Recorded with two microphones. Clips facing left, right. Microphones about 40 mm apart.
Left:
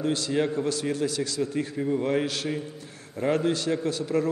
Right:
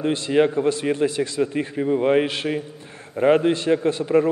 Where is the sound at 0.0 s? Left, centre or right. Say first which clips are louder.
Right 6 dB; right.